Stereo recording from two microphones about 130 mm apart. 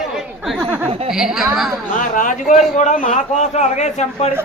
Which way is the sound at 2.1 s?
80° left.